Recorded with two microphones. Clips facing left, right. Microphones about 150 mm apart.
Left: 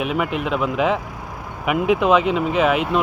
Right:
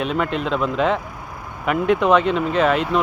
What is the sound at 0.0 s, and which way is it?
Speech, 10° left (ahead or behind).